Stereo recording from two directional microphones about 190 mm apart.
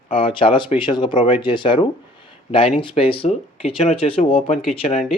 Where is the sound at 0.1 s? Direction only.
30° left (ahead or behind).